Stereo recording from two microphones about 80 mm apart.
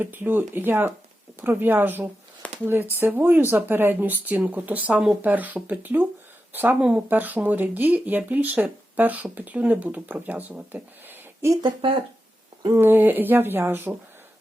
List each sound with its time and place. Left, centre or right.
0.0 s speech: right
2.4 s a sound: centre
3.0 s speech: right
11.6 s speech: right
12.7 s speech: right